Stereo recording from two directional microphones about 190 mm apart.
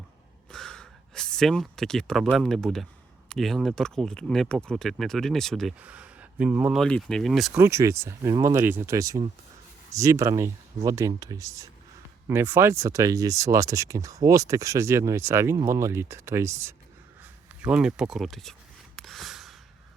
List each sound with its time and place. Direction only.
0.5 s a sound: 5° left (ahead or behind)
2.4 s speech: centre (ahead or behind)
6.8 s speech: 5° left (ahead or behind)
7.5 s speech: 15° right (ahead or behind); by 18.5 s centre (ahead or behind)
18.9 s snort: centre (ahead or behind)